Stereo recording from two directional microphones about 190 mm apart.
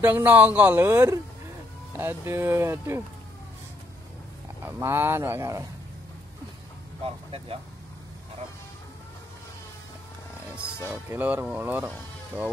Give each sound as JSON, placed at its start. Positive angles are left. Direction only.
{"t": 0.0, "sound": "speech", "side_deg": -10}
{"t": 4.6, "sound": "speech", "side_deg": -10}
{"t": 7.0, "sound": "speech", "side_deg": -30}
{"t": 10.9, "sound": "speech", "side_deg": -10}